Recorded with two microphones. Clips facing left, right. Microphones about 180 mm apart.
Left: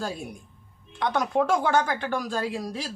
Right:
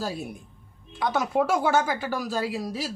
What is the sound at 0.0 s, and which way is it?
Speech, 5° right (ahead or behind).